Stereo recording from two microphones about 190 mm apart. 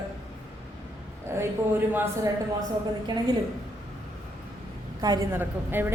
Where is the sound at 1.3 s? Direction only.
15° right (ahead or behind).